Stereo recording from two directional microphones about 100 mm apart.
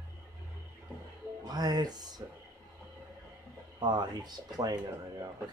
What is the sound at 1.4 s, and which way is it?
Music, 40° right (ahead or behind).